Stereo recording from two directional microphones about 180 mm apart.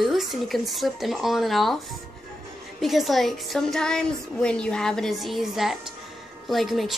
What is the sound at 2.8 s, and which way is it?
A woman's voice, centre (ahead or behind).